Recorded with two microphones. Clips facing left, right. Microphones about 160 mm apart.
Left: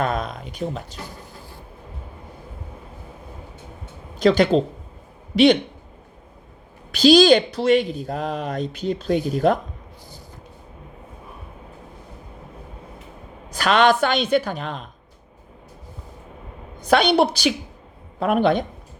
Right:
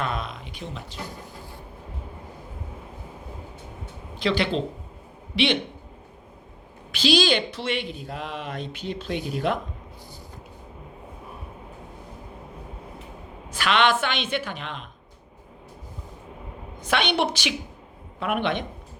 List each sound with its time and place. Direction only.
0.0 s speech: 45° left (ahead or behind)
4.2 s speech: 45° left (ahead or behind)
6.9 s a woman's voice: 40° left (ahead or behind)
13.5 s a woman's voice: 40° left (ahead or behind)
16.8 s a woman's voice: 35° left (ahead or behind)